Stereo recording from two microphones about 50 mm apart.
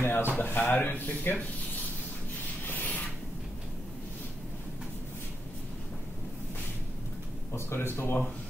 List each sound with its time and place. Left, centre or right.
0.0 s a sound: left
0.4 s speech: left
2.6 s rub: left
7.5 s speech: left